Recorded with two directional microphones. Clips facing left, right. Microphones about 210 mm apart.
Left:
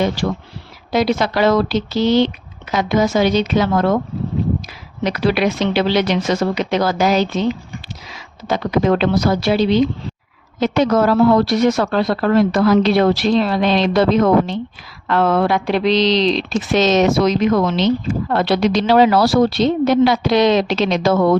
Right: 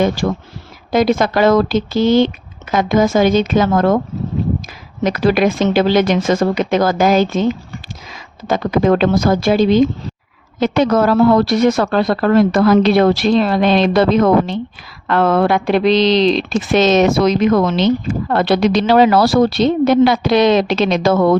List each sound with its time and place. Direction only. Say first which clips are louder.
0.2 s speech: right 2 dB; 45° right (ahead or behind)
5.0 s speech: right 3 dB; 45° right (ahead or behind)